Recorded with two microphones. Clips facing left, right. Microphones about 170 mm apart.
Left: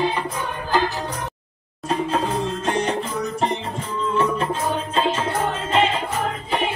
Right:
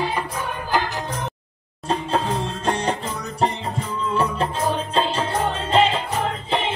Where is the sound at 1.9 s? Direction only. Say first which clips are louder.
Even; 30° right (ahead or behind).